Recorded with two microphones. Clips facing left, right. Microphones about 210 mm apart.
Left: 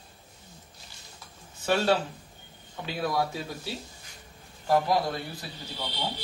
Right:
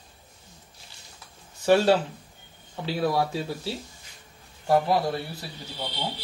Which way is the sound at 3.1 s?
30° right (ahead or behind).